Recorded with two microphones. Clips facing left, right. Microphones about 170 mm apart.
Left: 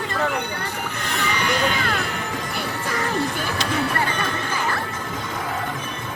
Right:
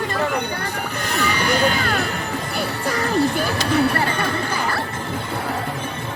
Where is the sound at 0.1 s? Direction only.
35° right (ahead or behind).